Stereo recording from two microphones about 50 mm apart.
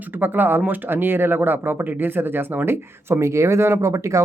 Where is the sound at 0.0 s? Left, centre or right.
Right.